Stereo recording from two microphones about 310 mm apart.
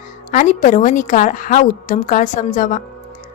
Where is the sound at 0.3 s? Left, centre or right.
Left.